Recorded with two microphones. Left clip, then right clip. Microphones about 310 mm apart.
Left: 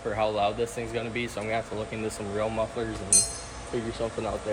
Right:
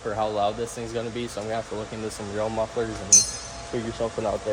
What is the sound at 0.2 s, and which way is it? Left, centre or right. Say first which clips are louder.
Speech: right 1 dB; centre.